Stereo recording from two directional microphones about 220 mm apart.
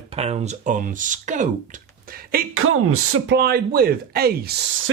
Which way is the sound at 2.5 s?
75° right (ahead or behind).